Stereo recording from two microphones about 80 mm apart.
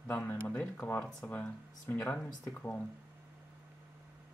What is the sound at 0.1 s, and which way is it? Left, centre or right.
Speech, left.